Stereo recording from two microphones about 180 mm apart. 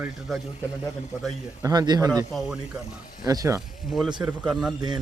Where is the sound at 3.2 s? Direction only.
20° right (ahead or behind).